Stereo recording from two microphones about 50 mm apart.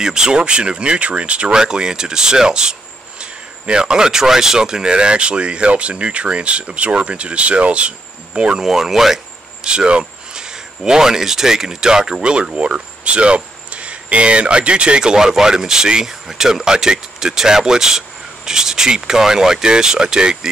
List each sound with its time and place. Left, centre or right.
0.0 s speech: centre
8.6 s speech: centre